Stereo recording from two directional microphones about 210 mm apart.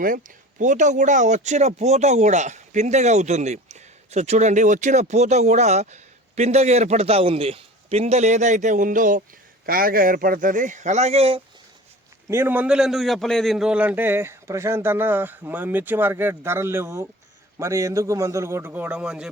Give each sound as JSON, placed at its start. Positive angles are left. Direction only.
{"t": 0.0, "sound": "speech", "side_deg": -40}
{"t": 12.3, "sound": "a man's voice", "side_deg": -10}